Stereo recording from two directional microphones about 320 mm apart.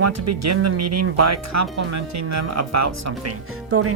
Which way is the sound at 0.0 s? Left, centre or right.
Right.